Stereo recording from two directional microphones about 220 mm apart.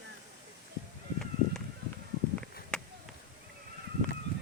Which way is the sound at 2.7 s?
5° left (ahead or behind).